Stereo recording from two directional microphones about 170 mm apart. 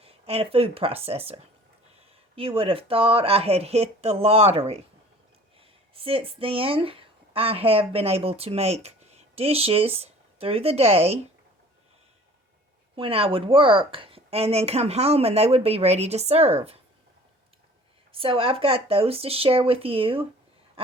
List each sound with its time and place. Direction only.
0.0 s a woman's voice: 35° right (ahead or behind)
13.0 s a woman's voice: 35° right (ahead or behind)
18.1 s a woman's voice: 35° right (ahead or behind)
20.8 s a sound: 35° right (ahead or behind)